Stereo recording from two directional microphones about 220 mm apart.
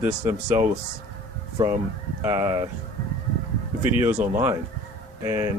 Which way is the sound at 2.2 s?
15° right (ahead or behind).